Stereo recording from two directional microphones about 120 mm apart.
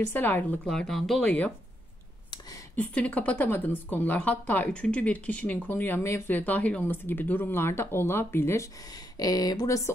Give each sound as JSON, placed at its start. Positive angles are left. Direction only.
{"t": 0.0, "sound": "speech", "side_deg": 15}
{"t": 2.7, "sound": "speech", "side_deg": 10}
{"t": 9.2, "sound": "speech", "side_deg": 30}